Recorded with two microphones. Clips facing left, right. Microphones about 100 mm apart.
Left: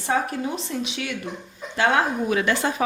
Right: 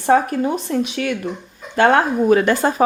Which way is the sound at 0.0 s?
50° right (ahead or behind).